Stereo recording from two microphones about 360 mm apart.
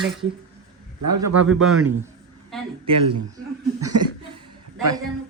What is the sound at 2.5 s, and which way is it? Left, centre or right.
Speech, centre.